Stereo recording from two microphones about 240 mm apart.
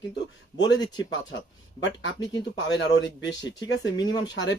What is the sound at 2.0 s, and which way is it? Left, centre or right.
Speech, left.